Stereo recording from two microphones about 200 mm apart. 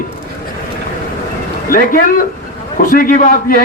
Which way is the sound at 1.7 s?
45° left (ahead or behind).